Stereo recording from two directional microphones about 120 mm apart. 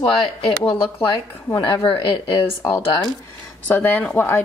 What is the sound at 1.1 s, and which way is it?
Speech, 40° left (ahead or behind).